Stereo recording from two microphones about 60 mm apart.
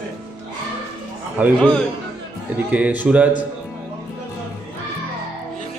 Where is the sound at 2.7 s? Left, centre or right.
Right.